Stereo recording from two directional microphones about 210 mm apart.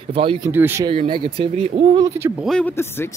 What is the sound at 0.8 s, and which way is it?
Speech, 25° right (ahead or behind).